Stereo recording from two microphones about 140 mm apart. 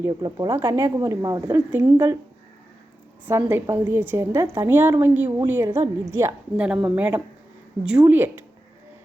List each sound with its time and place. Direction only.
0.0 s a woman's voice: 30° right (ahead or behind)
3.2 s a woman's voice: 20° right (ahead or behind)